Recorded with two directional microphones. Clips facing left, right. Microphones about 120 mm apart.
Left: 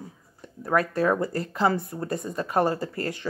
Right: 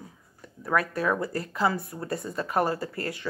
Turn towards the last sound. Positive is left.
turn(degrees=35)  # may be behind; listen again after turning